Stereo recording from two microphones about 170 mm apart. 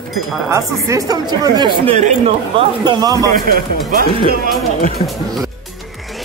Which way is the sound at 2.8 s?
25° right (ahead or behind).